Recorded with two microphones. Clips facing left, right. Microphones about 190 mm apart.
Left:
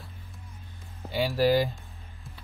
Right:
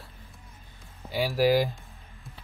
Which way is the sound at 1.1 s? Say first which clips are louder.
Even; 5° right (ahead or behind).